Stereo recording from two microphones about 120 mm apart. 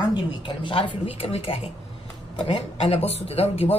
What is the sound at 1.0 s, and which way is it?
Speech, 55° left (ahead or behind).